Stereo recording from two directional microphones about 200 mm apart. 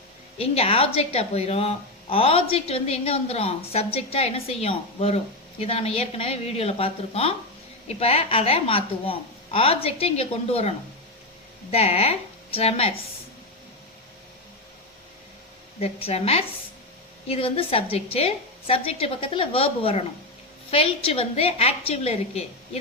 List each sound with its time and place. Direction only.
0.3 s a woman's voice: 30° left (ahead or behind)
15.8 s a woman's voice: 30° left (ahead or behind)